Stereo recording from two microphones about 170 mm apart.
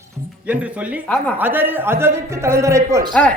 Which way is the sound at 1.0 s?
10° left (ahead or behind).